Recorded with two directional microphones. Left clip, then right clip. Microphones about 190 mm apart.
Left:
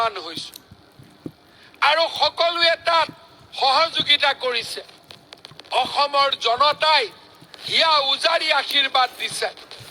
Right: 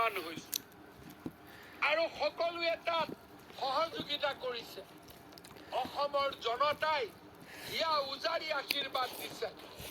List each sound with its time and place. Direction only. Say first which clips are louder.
0.0 s speech: left 10 dB; 55° left (ahead or behind)
1.8 s speech: left 14 dB; 45° left (ahead or behind)